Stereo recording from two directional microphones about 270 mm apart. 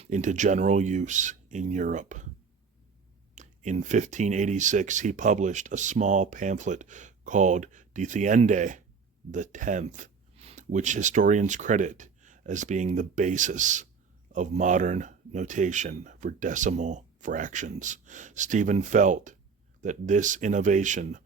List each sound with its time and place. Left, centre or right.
0.0 s speech: right
3.3 s speech: right